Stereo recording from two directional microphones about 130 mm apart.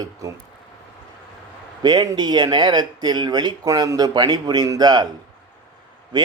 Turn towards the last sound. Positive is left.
turn(degrees=-35)  # may be behind; listen again after turning